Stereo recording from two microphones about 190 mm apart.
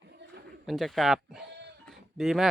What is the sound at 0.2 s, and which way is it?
Pigeon, 65° right (ahead or behind).